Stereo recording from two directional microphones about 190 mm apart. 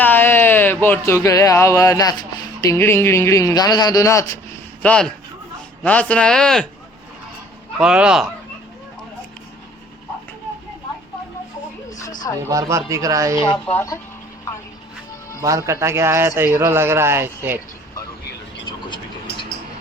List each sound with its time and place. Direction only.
0.0 s speech: 10° left (ahead or behind)
4.8 s speech: 5° left (ahead or behind)
7.8 s speech: 5° right (ahead or behind)
12.5 s speech: 15° right (ahead or behind)
13.7 s speech: 15° left (ahead or behind)
15.4 s speech: 15° right (ahead or behind)